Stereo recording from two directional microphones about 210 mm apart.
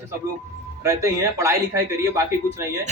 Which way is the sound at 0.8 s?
15° right (ahead or behind).